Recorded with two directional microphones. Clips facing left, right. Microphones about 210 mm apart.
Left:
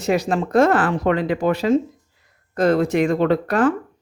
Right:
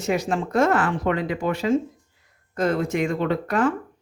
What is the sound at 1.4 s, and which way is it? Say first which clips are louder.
Speech: left 6 dB; 90° left.